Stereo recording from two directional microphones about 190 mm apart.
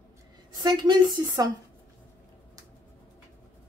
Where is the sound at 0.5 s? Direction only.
25° right (ahead or behind).